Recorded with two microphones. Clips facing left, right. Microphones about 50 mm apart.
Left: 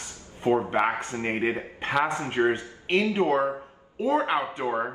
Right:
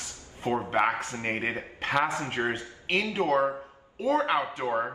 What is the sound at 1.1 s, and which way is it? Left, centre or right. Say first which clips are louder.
Speech: left 2 dB; left.